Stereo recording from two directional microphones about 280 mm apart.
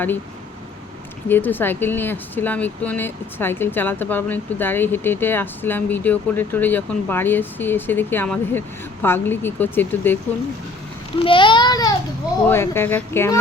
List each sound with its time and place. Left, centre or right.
1.3 s speech: centre
11.2 s a sound: centre
12.5 s speech: centre